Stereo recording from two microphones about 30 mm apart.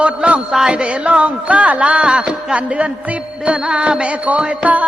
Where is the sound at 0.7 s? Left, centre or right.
Right.